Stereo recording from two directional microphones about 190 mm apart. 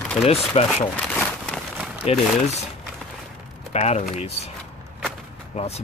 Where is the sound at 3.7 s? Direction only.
40° left (ahead or behind).